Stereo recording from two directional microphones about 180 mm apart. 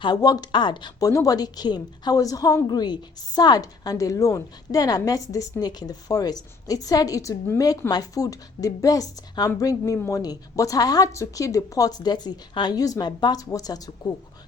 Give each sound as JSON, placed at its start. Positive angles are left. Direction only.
{"t": 0.0, "sound": "speech", "side_deg": 20}